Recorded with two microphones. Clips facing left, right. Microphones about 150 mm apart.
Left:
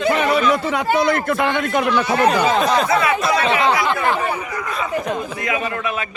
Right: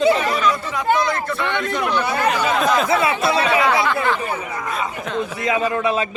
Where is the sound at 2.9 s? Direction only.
25° right (ahead or behind).